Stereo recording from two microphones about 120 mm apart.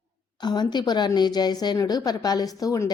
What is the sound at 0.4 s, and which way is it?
A woman's voice, 35° left (ahead or behind).